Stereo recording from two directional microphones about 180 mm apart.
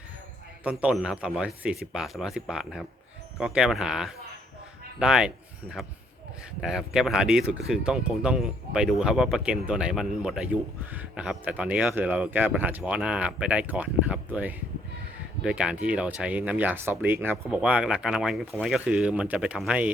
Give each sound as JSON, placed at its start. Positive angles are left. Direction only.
{"t": 0.6, "sound": "speech", "side_deg": -5}
{"t": 6.6, "sound": "speech", "side_deg": -5}